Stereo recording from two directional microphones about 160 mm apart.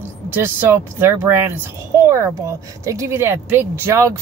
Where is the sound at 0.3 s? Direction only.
15° right (ahead or behind).